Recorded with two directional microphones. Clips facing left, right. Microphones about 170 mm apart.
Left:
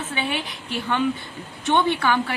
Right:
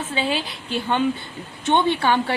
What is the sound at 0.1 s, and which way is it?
A woman's voice, 30° right (ahead or behind).